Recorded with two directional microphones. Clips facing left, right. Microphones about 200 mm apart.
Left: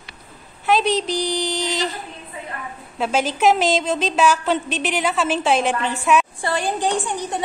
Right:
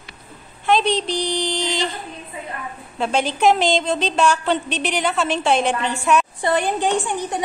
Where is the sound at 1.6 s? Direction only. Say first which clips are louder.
Even; 30° right (ahead or behind).